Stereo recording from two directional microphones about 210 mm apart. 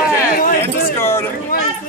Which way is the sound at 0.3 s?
40° left (ahead or behind).